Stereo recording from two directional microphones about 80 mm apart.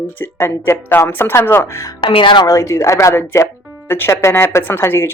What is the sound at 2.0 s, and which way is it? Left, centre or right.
Speech, left.